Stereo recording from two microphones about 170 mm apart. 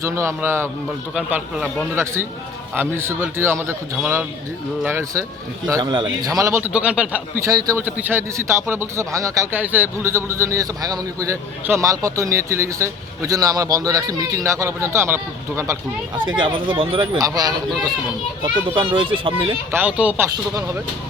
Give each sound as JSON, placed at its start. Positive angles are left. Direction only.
{"t": 0.0, "sound": "speech", "side_deg": -15}
{"t": 6.7, "sound": "speech", "side_deg": -5}
{"t": 16.3, "sound": "speech", "side_deg": -30}
{"t": 19.7, "sound": "speech", "side_deg": -10}